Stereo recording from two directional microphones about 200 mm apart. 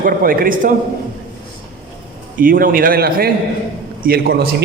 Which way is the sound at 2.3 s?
45° right (ahead or behind).